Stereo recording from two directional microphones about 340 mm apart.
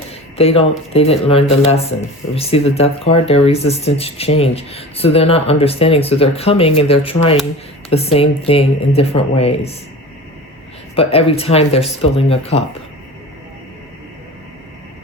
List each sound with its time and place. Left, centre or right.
0.3 s speech: centre
10.9 s speech: centre